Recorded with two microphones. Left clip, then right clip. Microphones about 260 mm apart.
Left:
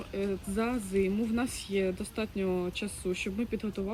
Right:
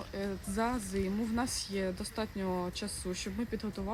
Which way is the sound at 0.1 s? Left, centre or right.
Centre.